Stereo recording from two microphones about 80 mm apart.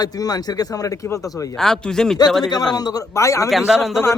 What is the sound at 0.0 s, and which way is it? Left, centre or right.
A man's voice, left.